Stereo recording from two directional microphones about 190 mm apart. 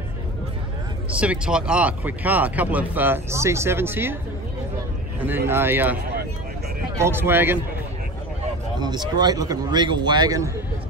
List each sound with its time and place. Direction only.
1.1 s speech: 5° right (ahead or behind)
5.5 s speech: 10° right (ahead or behind)
7.0 s speech: 10° right (ahead or behind)
8.7 s speech: 20° right (ahead or behind)